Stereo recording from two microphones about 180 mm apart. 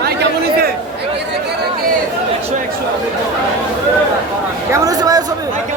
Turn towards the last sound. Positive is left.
turn(degrees=-20)  # may be behind; listen again after turning